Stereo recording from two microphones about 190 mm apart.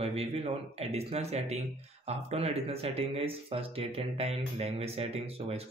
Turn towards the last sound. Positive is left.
turn(degrees=-30)  # may be behind; listen again after turning